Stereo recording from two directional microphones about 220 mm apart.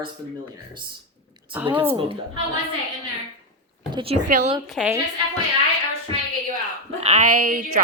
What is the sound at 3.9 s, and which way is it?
Speech, 25° right (ahead or behind).